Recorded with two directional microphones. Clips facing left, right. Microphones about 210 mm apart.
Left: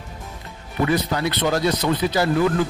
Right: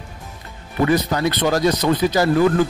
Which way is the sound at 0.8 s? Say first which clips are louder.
Right 3 dB; 45° right (ahead or behind).